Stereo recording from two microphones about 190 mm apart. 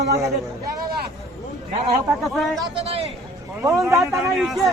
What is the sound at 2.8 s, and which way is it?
Speech, 30° right (ahead or behind).